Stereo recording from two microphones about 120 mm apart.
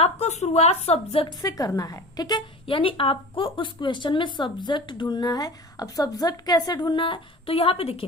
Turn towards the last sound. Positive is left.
turn(degrees=55)  # may be behind; listen again after turning